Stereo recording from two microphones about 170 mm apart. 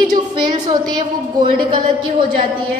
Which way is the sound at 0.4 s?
25° right (ahead or behind).